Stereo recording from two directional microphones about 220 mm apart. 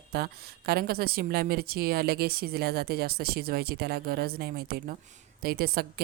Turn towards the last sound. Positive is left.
turn(degrees=-45)  # may be behind; listen again after turning